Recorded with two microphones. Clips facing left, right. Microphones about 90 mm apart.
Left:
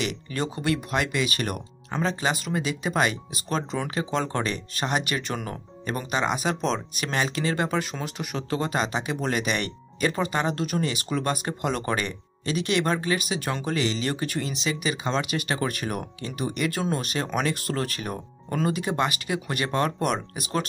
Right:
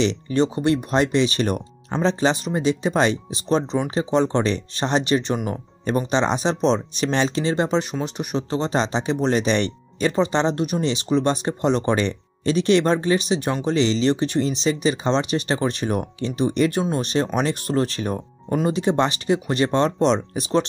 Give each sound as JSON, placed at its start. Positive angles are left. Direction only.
{"t": 0.0, "sound": "speech", "side_deg": -25}